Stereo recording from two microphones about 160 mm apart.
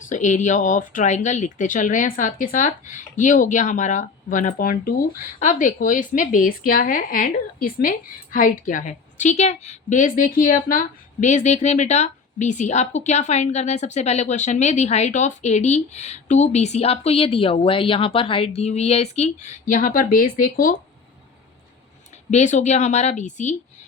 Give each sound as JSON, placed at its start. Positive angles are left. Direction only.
{"t": 0.1, "sound": "speech", "side_deg": 50}
{"t": 22.3, "sound": "speech", "side_deg": 45}